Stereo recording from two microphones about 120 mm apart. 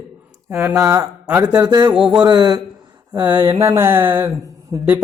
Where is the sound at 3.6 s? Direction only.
25° right (ahead or behind).